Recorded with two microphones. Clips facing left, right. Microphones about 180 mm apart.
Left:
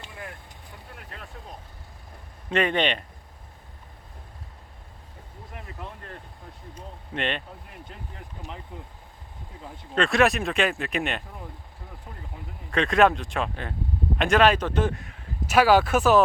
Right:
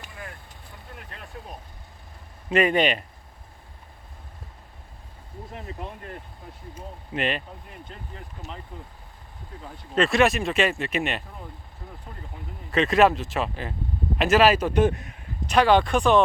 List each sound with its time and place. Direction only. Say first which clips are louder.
2.5 s a man's voice: right 3 dB; 10° right (ahead or behind)
5.5 s speech: right 3 dB; 25° right (ahead or behind)
6.7 s speech: right 2 dB; 5° right (ahead or behind)
8.7 s speech: even; 15° left (ahead or behind)
9.9 s speech: right 1 dB; centre (ahead or behind)
12.7 s a man's voice: right 1 dB; centre (ahead or behind); by 15.1 s 20° right (ahead or behind)
15.4 s speech: even; 5° left (ahead or behind)